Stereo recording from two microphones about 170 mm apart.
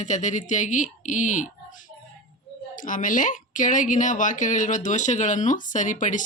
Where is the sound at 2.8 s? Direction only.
50° left (ahead or behind).